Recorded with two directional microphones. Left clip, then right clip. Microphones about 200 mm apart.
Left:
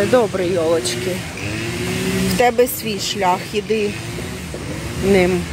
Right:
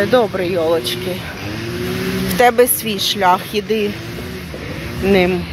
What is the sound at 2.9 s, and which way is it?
Speech, 40° right (ahead or behind).